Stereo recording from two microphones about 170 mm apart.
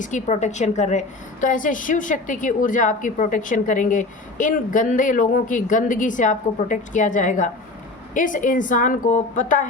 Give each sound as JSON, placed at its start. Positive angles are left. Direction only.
{"t": 0.0, "sound": "a woman's voice", "side_deg": 45}